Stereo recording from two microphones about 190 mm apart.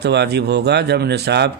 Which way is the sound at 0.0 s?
60° right (ahead or behind).